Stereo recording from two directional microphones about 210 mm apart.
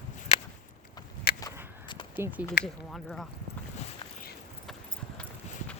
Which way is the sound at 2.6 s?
50° left (ahead or behind).